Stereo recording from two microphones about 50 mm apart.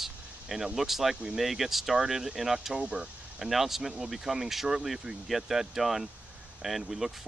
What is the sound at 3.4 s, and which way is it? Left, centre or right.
Speech, centre.